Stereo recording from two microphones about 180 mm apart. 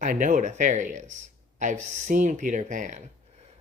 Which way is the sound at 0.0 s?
45° right (ahead or behind).